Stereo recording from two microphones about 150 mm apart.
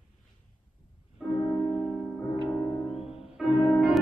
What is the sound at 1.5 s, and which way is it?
Music, 15° left (ahead or behind).